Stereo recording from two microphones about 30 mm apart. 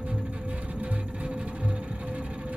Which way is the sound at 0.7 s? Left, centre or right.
Right.